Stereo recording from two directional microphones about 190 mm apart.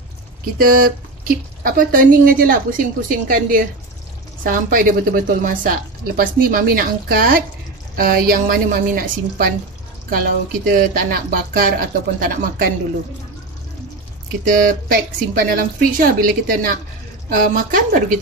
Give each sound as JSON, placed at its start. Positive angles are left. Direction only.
{"t": 0.6, "sound": "a woman's voice", "side_deg": -50}
{"t": 14.4, "sound": "a woman's voice", "side_deg": -50}